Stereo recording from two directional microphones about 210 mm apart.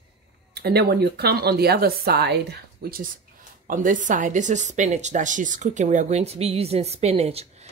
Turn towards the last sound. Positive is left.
turn(degrees=-30)  # may be behind; listen again after turning